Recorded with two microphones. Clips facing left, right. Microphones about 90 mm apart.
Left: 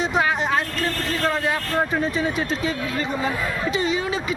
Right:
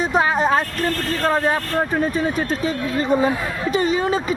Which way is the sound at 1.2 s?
40° right (ahead or behind).